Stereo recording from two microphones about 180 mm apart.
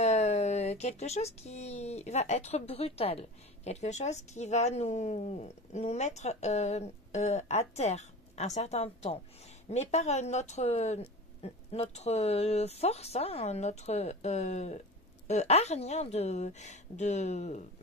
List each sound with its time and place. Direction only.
0.0 s speech: 40° left (ahead or behind)